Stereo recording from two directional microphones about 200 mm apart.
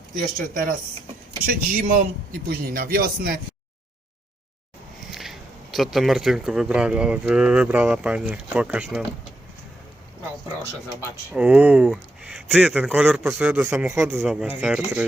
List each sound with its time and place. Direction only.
0.3 s a man's voice: 45° right (ahead or behind)
5.1 s speech: centre (ahead or behind)
11.3 s speech: 5° right (ahead or behind)